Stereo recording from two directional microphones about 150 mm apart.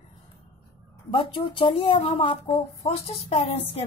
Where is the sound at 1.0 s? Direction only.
35° left (ahead or behind).